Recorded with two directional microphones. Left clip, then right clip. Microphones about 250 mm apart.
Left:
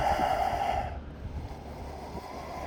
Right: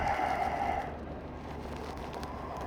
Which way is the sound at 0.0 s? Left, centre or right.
Left.